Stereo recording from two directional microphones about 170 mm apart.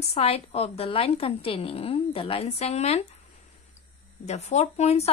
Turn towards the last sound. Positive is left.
turn(degrees=40)  # may be behind; listen again after turning